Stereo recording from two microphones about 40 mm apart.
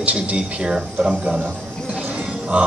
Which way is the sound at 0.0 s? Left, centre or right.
Right.